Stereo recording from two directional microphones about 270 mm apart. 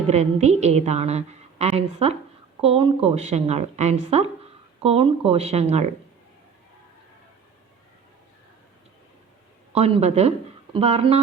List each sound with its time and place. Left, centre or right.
0.1 s a woman's voice: right
9.7 s speech: right